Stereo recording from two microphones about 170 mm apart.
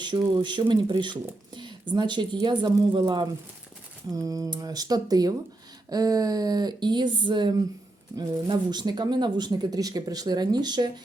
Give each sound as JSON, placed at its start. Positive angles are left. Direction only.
{"t": 0.0, "sound": "speech", "side_deg": -25}